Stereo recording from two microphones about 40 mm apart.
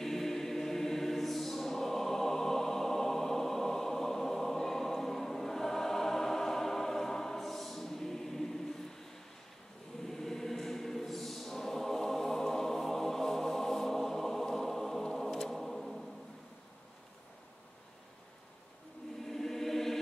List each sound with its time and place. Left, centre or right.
0.0 s choir: centre
10.0 s choir: centre
19.2 s choir: centre